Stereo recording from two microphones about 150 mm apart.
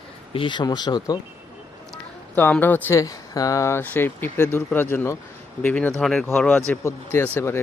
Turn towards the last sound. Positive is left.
turn(degrees=15)  # may be behind; listen again after turning